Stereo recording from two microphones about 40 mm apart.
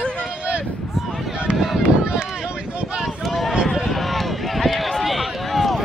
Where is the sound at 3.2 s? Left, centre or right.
Centre.